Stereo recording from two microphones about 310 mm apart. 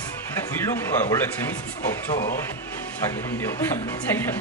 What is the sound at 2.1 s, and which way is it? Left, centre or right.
Speech, centre.